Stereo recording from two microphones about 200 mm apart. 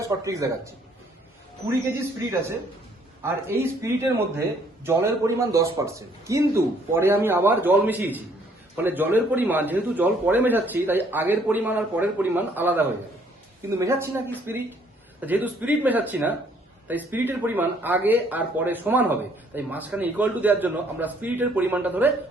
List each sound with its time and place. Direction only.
0.0 s speech: 15° right (ahead or behind)
2.2 s speech: 15° right (ahead or behind)